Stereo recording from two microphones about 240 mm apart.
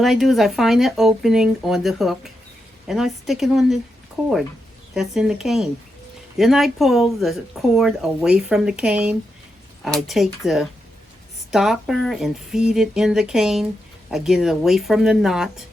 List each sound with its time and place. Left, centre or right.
0.0 s speech: centre